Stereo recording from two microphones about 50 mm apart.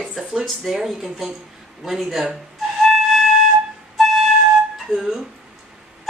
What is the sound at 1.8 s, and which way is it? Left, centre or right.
Flute, centre.